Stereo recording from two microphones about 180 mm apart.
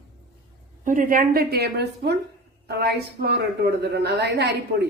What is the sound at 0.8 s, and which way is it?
A woman's voice, 45° right (ahead or behind).